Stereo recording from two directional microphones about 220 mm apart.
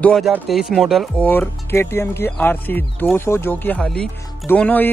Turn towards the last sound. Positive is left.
turn(degrees=5)  # may be behind; listen again after turning